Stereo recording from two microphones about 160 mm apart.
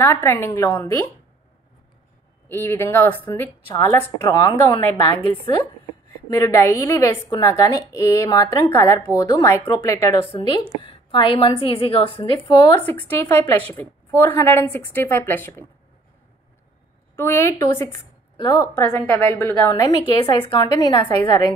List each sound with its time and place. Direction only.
0.0 s a woman's voice: 15° left (ahead or behind)
2.4 s a woman's voice: 15° left (ahead or behind)
5.3 s a woman's voice: 35° left (ahead or behind)
6.3 s a woman's voice: 20° left (ahead or behind)
10.3 s a woman's voice: 30° left (ahead or behind)
12.7 s a woman's voice: 10° left (ahead or behind)
17.1 s a woman's voice: 15° left (ahead or behind)
20.5 s a woman's voice: 30° left (ahead or behind)